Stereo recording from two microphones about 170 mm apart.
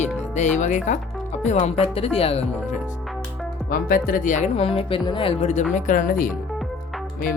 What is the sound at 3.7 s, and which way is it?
Speech, 55° left (ahead or behind).